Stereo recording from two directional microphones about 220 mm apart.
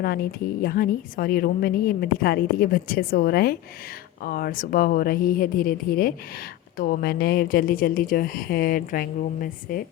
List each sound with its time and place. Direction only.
0.0 s a woman's voice: 45° left (ahead or behind)